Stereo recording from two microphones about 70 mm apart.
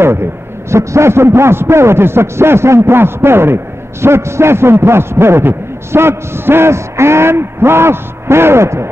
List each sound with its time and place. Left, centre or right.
0.0 s a man's voice: right